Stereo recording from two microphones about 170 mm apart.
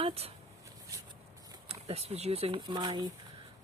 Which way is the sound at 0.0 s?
35° right (ahead or behind).